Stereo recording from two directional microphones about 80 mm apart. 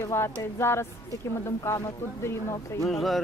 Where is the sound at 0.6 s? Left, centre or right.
Left.